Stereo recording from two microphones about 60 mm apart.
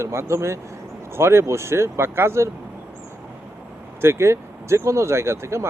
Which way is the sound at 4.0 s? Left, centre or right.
Right.